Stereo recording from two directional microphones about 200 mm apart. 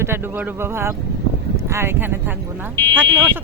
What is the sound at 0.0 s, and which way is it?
Speech, 10° right (ahead or behind).